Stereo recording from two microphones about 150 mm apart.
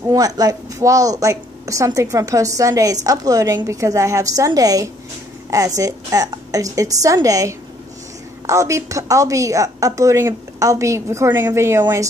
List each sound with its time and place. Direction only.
0.1 s a woman's voice: 25° right (ahead or behind)